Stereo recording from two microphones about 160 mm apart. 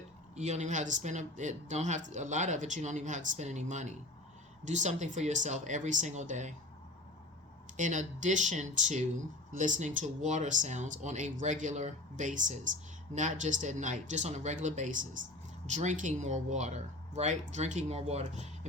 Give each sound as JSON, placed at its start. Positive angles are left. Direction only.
{"t": 0.3, "sound": "speech", "side_deg": -45}
{"t": 7.8, "sound": "speech", "side_deg": -50}